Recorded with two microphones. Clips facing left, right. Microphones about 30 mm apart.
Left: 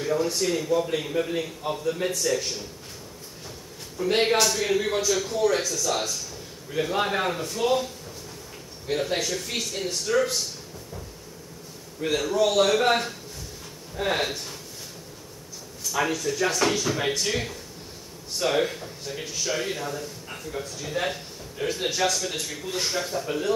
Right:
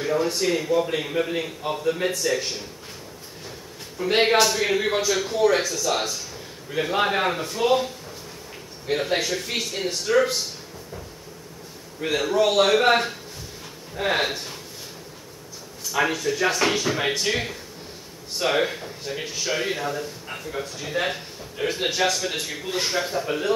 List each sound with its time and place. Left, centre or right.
0.0 s speech: centre
4.0 s speech: centre
12.0 s speech: centre
15.8 s speech: centre